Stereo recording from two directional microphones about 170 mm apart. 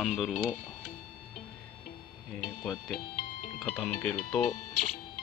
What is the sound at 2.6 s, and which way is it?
Speech, 5° left (ahead or behind).